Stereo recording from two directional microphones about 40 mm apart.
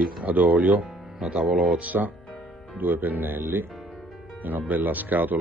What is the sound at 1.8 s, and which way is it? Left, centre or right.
Speech, right.